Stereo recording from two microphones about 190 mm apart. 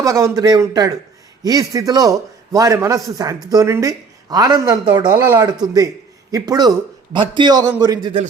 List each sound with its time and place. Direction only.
0.0 s a man's voice: 15° right (ahead or behind)